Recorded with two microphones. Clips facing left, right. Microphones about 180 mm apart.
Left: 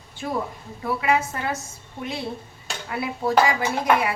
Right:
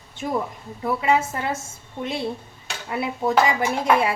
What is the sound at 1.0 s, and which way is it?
Speech, 25° right (ahead or behind).